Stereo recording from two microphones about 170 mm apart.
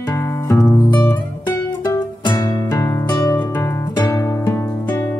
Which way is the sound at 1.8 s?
20° left (ahead or behind).